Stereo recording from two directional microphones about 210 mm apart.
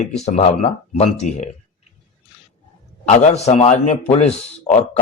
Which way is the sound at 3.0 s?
30° left (ahead or behind).